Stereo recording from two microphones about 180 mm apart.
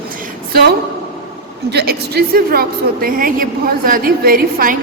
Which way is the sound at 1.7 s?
65° right (ahead or behind).